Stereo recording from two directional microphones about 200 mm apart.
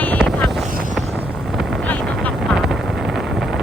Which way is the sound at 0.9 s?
5° right (ahead or behind).